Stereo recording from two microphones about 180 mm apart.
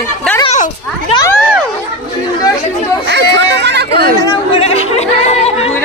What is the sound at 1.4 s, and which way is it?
Speech, 5° right (ahead or behind).